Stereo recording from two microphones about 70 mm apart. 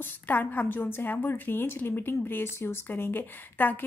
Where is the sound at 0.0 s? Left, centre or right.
Left.